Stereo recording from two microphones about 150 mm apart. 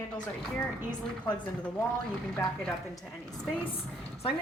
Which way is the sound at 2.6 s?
Centre (ahead or behind).